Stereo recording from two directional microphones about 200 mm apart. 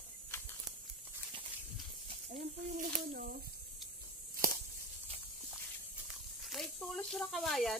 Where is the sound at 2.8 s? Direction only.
45° right (ahead or behind).